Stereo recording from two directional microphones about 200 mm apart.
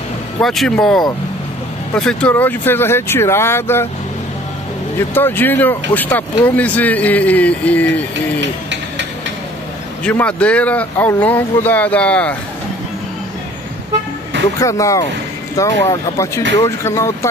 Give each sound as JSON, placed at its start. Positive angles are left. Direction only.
{"t": 0.4, "sound": "speech", "side_deg": 0}
{"t": 5.1, "sound": "speech", "side_deg": 10}
{"t": 10.0, "sound": "speech", "side_deg": 5}
{"t": 14.6, "sound": "speech", "side_deg": 15}